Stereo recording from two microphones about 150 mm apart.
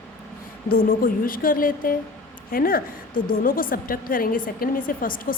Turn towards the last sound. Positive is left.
turn(degrees=70)  # may be behind; listen again after turning